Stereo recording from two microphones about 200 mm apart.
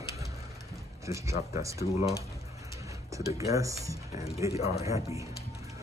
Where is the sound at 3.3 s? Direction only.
15° right (ahead or behind).